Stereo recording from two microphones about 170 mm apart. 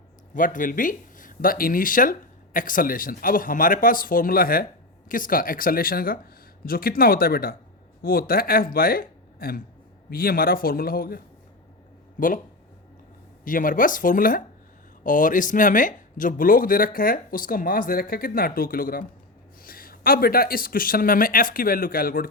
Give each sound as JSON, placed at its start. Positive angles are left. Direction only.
{"t": 0.3, "sound": "speech", "side_deg": 50}
{"t": 13.4, "sound": "speech", "side_deg": 55}